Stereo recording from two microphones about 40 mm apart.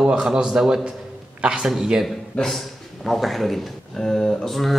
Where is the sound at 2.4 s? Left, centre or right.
Left.